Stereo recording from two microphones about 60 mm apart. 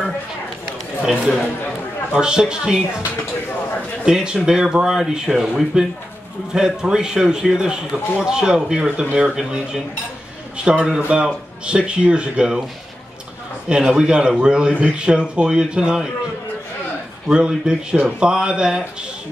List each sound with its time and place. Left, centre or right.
2.1 s a man's voice: centre
4.0 s a man's voice: centre
10.6 s a man's voice: centre
13.7 s a man's voice: centre
17.3 s a man's voice: centre